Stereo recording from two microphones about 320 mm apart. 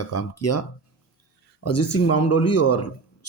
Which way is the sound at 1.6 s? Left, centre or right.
Left.